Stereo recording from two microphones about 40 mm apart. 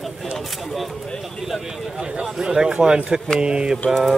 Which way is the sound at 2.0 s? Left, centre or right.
Right.